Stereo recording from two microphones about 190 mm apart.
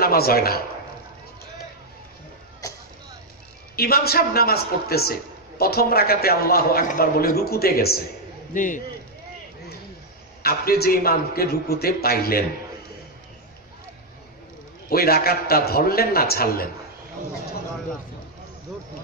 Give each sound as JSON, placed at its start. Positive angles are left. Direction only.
{"t": 0.0, "sound": "a man's voice", "side_deg": 50}
{"t": 3.7, "sound": "a man's voice", "side_deg": 55}
{"t": 8.5, "sound": "a man's voice", "side_deg": 45}
{"t": 10.4, "sound": "a man's voice", "side_deg": 55}
{"t": 14.9, "sound": "a man's voice", "side_deg": 55}